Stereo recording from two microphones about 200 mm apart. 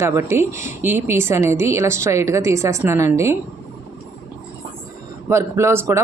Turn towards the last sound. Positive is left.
turn(degrees=-15)  # may be behind; listen again after turning